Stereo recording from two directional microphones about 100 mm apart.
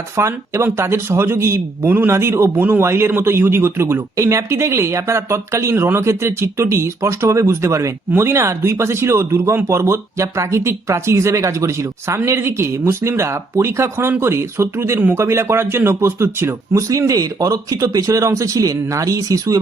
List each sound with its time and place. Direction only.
0.2 s speech: 30° right (ahead or behind)